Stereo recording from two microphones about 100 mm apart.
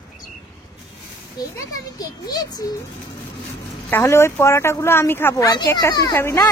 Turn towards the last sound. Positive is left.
turn(degrees=25)  # may be behind; listen again after turning